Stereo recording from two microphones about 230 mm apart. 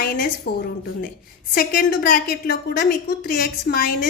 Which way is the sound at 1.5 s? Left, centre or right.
Left.